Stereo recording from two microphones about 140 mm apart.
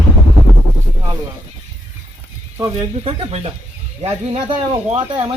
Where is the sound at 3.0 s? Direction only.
50° right (ahead or behind).